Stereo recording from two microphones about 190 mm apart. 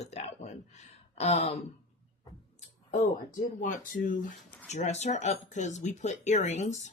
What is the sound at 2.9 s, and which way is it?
Speech, 40° left (ahead or behind).